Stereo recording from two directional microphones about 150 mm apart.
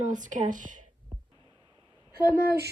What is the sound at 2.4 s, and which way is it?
Speech, 90° right.